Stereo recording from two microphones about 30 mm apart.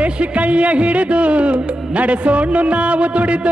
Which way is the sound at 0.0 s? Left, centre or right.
Right.